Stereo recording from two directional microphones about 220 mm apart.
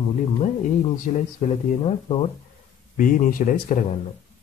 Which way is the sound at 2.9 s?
40° left (ahead or behind).